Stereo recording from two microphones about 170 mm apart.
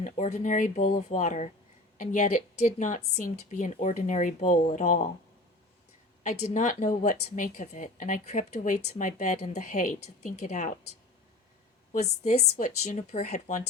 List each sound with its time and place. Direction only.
0.0 s speech: 45° left (ahead or behind)
6.2 s speech: 45° left (ahead or behind)
11.9 s speech: 45° left (ahead or behind)